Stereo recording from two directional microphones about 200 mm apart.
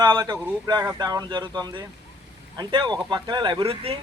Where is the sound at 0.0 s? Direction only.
20° right (ahead or behind).